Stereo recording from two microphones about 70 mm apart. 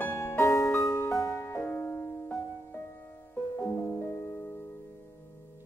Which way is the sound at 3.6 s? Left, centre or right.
Left.